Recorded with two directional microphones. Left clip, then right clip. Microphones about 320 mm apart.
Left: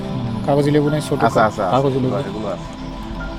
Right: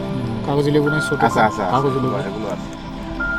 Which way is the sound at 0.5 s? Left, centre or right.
Centre.